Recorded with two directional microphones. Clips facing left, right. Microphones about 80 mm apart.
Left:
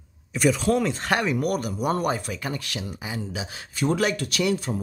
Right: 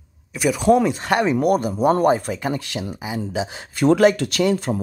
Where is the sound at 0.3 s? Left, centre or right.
Centre.